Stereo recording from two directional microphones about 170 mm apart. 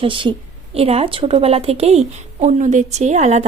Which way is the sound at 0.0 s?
30° right (ahead or behind).